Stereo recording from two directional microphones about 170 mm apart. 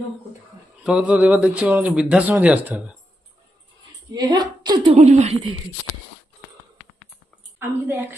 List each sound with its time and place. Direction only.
0.9 s speech: 5° right (ahead or behind)
4.1 s a woman's voice: 25° right (ahead or behind)
4.9 s a woman's voice: 40° right (ahead or behind)
7.6 s speech: 15° right (ahead or behind)